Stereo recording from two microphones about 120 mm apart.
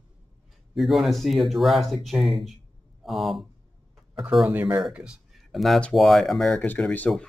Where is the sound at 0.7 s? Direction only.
Centre (ahead or behind).